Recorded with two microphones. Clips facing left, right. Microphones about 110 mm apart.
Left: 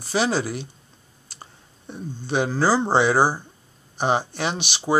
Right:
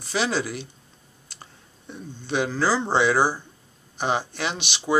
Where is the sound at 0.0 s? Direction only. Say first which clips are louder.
Left 3 dB; 40° left (ahead or behind).